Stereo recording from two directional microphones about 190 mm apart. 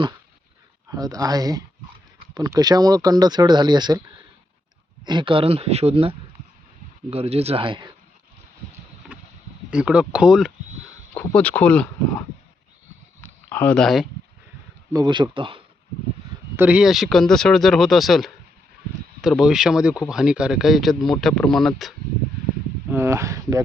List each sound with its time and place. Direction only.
0.9 s speech: 20° right (ahead or behind)
5.0 s speech: 25° right (ahead or behind)
9.0 s a sound: 5° right (ahead or behind)
9.6 s speech: 5° right (ahead or behind)
13.2 s speech: 10° left (ahead or behind)
14.9 s speech: 25° right (ahead or behind)
16.6 s speech: 5° right (ahead or behind)
22.9 s speech: 15° right (ahead or behind)